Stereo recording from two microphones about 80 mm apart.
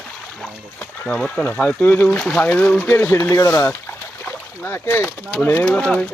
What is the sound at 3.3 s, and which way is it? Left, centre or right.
Speech, left.